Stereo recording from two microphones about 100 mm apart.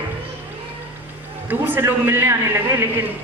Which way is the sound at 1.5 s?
20° right (ahead or behind).